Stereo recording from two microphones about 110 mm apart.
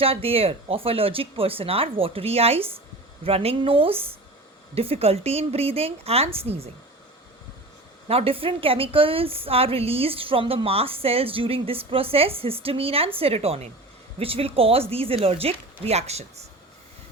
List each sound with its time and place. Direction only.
0.0 s a woman's voice: 60° right (ahead or behind)
8.0 s a woman's voice: 60° right (ahead or behind)